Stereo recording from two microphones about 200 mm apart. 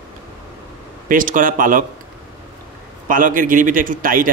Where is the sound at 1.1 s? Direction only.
40° right (ahead or behind).